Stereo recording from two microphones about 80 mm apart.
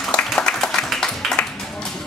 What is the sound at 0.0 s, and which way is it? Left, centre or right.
Applause, centre.